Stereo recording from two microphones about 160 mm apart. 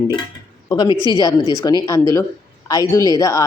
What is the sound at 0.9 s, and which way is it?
Speech, 25° right (ahead or behind).